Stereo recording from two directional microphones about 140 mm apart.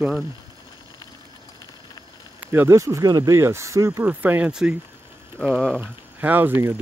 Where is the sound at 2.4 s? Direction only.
15° right (ahead or behind); by 5.8 s centre (ahead or behind).